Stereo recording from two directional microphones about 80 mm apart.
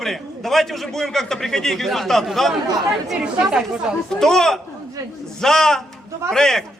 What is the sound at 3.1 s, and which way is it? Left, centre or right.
Speech, centre.